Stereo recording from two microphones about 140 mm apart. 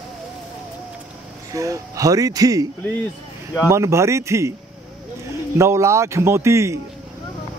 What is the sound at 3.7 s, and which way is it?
A man's voice, 20° right (ahead or behind).